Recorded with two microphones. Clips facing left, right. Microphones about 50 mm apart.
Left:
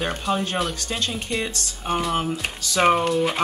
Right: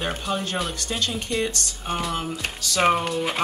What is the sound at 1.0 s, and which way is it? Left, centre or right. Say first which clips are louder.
Speech: right 2 dB; left.